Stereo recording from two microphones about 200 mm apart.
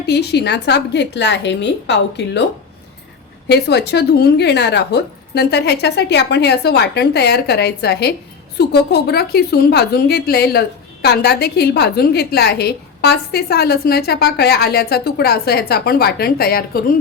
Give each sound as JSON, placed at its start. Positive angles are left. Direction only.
{"t": 0.0, "sound": "speech", "side_deg": 55}
{"t": 3.5, "sound": "a woman's voice", "side_deg": 55}